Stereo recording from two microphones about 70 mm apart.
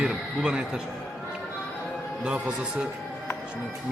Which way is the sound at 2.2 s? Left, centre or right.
Centre.